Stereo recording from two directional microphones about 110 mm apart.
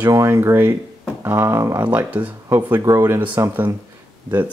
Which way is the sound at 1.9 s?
15° right (ahead or behind).